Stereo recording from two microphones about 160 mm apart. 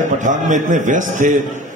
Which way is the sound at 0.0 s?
50° right (ahead or behind).